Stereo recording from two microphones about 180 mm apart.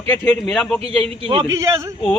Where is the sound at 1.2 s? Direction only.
30° right (ahead or behind).